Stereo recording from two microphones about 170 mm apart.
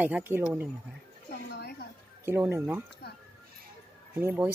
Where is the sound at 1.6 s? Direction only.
70° left (ahead or behind).